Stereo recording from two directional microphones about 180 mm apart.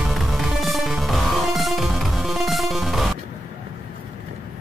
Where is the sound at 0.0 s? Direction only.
Centre (ahead or behind).